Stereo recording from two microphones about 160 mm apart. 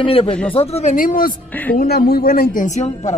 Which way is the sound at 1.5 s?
10° left (ahead or behind).